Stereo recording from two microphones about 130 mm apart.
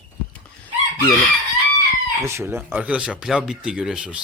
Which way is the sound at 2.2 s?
20° right (ahead or behind).